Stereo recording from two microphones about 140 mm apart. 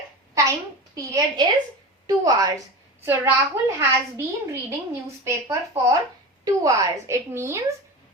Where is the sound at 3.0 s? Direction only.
15° right (ahead or behind).